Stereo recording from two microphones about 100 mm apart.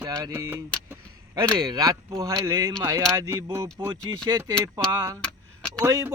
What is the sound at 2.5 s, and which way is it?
Speech, 45° right (ahead or behind).